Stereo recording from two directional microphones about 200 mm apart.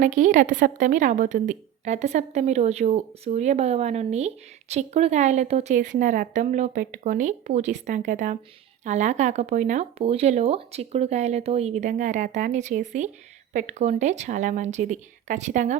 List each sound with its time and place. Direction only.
0.0 s a woman's voice: 40° right (ahead or behind)